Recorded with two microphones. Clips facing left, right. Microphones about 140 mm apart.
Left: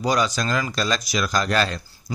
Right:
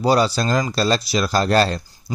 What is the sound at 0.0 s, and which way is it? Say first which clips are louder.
Speech: right 5 dB; 30° right (ahead or behind).